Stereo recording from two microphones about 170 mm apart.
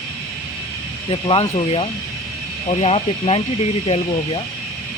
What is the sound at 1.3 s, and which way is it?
Speech, 35° left (ahead or behind).